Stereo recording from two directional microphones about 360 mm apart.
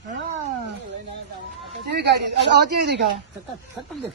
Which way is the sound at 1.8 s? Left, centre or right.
Right.